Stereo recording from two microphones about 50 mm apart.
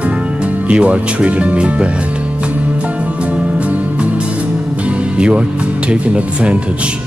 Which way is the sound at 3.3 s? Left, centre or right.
Right.